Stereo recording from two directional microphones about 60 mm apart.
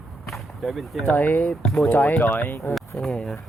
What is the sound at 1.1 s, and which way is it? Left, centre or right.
Speech, left.